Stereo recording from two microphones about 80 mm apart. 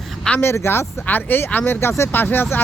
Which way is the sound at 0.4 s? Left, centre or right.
Left.